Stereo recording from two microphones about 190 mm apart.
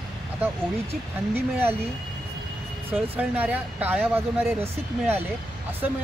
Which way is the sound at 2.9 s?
10° right (ahead or behind).